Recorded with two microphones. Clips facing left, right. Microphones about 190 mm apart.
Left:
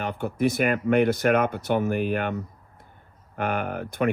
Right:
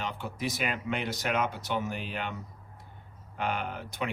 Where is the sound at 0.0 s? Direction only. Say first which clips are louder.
Left 10 dB; 55° left (ahead or behind).